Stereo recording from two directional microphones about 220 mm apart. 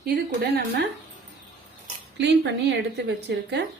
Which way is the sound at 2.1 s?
50° right (ahead or behind).